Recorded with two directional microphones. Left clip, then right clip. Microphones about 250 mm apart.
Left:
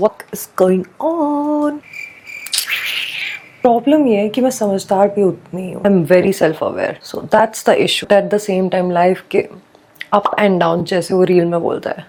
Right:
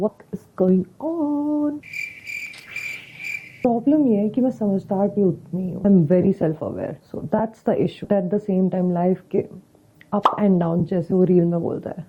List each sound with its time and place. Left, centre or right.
0.3 s speech: centre
0.9 s a sound: left
2.0 s cricket: centre
4.8 s speech: centre
10.0 s a sound: centre
10.2 s speech: centre